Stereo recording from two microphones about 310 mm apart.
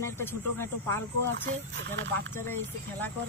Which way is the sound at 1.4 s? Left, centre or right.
Right.